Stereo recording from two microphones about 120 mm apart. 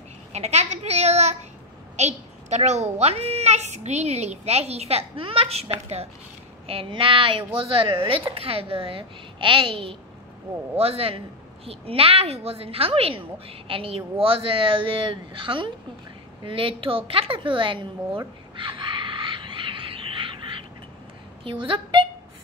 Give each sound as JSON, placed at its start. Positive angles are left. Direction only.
{"t": 0.3, "sound": "a woman's voice", "side_deg": -65}
{"t": 6.7, "sound": "a woman's voice", "side_deg": -50}
{"t": 18.6, "sound": "wild animals", "side_deg": -45}
{"t": 21.5, "sound": "a woman's voice", "side_deg": -45}